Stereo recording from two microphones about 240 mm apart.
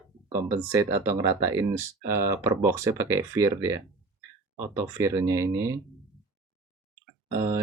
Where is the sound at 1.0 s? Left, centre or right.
Centre.